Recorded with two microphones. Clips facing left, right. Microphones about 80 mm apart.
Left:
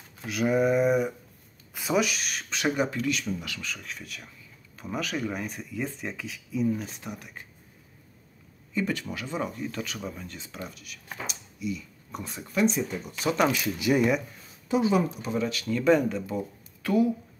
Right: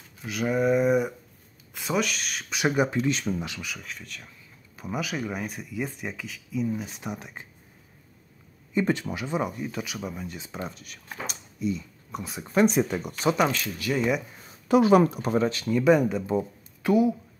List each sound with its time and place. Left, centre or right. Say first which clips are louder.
0.3 s speech: even; centre
2.5 s speech: right 3 dB; centre
3.6 s speech: even; centre
4.7 s speech: right 1 dB; centre
7.0 s speech: right 4 dB; right
8.7 s speech: right 4 dB; right
10.7 s speech: even; right
12.1 s speech: right 2 dB; centre
12.6 s speech: right 3 dB; right
13.5 s speech: left 4 dB; centre
14.7 s speech: right 6 dB; right
15.7 s speech: right 2 dB; centre